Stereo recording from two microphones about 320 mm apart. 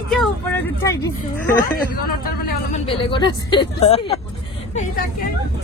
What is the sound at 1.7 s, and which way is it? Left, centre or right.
Speech, left.